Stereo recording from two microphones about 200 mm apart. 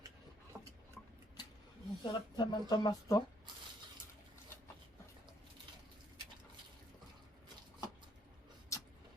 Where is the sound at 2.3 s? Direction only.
20° left (ahead or behind).